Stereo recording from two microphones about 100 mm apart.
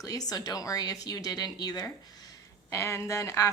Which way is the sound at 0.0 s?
40° left (ahead or behind).